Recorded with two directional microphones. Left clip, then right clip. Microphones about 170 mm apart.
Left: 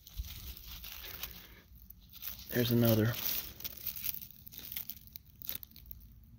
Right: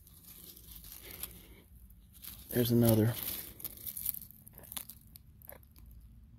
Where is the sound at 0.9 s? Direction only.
20° right (ahead or behind).